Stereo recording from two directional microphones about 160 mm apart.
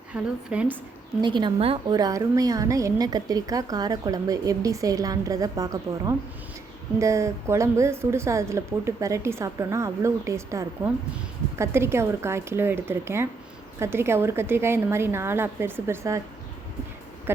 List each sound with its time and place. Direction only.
0.1 s a woman's voice: 5° right (ahead or behind)
1.2 s a woman's voice: 30° right (ahead or behind)
17.3 s a woman's voice: 15° right (ahead or behind)